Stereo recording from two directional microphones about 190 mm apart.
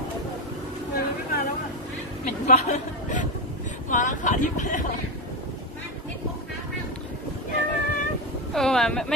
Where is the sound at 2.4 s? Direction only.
40° left (ahead or behind).